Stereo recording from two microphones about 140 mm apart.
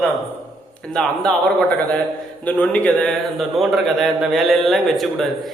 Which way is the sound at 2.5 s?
10° left (ahead or behind).